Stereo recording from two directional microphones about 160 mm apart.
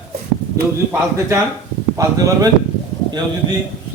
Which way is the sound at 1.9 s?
20° right (ahead or behind).